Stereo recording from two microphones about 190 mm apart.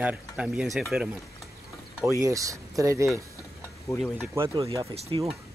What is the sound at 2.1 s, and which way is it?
Speech, 15° right (ahead or behind).